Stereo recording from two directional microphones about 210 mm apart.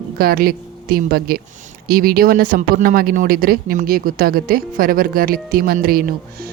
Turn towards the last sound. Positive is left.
turn(degrees=-45)  # may be behind; listen again after turning